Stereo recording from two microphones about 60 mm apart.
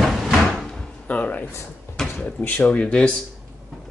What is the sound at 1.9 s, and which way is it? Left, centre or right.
Drawer open or close, left.